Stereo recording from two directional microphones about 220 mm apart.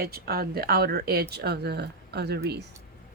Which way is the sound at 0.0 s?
45° right (ahead or behind).